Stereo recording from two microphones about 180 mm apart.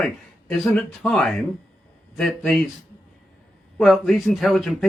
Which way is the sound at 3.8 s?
Centre (ahead or behind).